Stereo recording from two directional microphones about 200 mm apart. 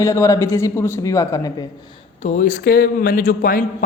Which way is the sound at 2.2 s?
35° left (ahead or behind).